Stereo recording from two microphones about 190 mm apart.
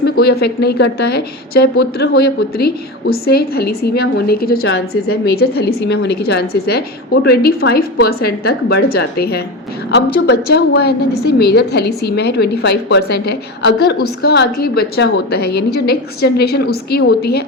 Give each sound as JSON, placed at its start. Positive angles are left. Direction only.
{"t": 0.0, "sound": "speech", "side_deg": 55}